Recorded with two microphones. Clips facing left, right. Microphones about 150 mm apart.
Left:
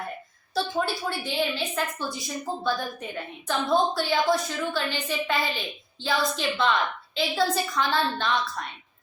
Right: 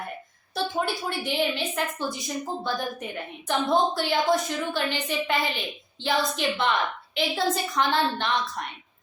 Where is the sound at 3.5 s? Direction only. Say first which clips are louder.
Right 1 dB; 20° right (ahead or behind).